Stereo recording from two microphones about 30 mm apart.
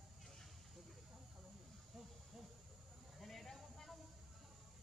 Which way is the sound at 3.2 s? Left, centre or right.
Centre.